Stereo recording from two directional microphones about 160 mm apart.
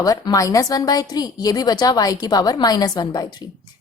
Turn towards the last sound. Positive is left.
turn(degrees=25)  # may be behind; listen again after turning